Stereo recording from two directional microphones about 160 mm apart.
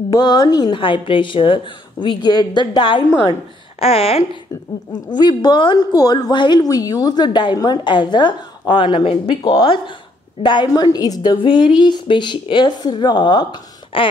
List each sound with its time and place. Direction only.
0.1 s a woman's voice: 25° left (ahead or behind)
5.1 s a woman's voice: 25° left (ahead or behind)